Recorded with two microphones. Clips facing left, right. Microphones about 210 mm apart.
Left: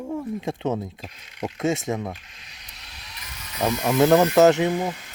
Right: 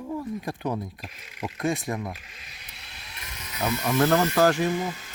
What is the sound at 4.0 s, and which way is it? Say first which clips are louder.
Speech: left 6 dB; 20° left (ahead or behind).